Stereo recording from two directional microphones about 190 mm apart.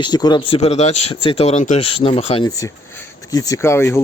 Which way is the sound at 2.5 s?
15° left (ahead or behind).